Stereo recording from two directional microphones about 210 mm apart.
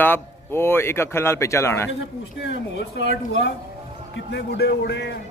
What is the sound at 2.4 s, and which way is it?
A man's voice, 55° left (ahead or behind).